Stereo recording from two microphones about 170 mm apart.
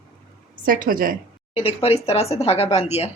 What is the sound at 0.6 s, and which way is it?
Speech, 55° right (ahead or behind).